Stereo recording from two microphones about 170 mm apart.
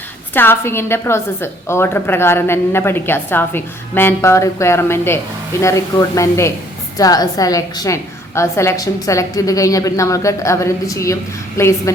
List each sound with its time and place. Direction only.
0.3 s a woman's voice: 15° left (ahead or behind)